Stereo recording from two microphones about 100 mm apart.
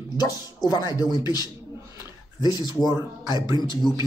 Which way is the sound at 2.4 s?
45° left (ahead or behind).